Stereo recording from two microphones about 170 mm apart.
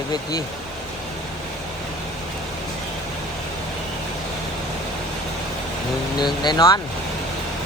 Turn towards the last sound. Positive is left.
turn(degrees=25)  # may be behind; listen again after turning